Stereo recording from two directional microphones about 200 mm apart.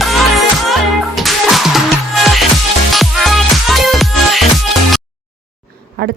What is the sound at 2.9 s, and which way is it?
Music, centre (ahead or behind).